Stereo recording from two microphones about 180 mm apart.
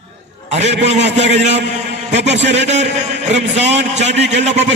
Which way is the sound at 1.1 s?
75° right (ahead or behind).